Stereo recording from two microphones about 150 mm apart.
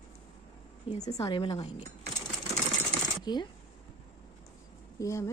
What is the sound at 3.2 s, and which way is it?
Speech, 30° left (ahead or behind).